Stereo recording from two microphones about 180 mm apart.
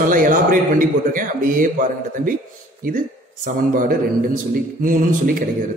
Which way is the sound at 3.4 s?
50° right (ahead or behind).